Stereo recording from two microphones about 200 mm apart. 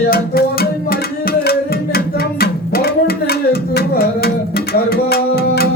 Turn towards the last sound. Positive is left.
turn(degrees=50)  # may be behind; listen again after turning